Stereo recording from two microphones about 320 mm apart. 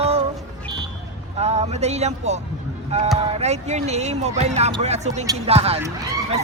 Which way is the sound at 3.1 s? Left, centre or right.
Centre.